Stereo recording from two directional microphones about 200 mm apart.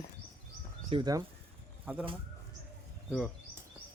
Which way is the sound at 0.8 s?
20° right (ahead or behind).